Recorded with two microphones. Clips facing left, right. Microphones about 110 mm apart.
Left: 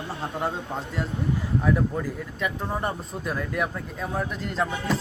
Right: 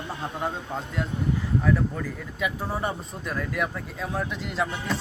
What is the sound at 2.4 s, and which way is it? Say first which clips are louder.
Speech: right 1 dB; 5° right (ahead or behind).